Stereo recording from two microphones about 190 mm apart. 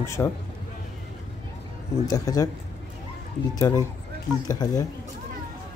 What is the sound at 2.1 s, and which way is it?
Speech, 20° left (ahead or behind).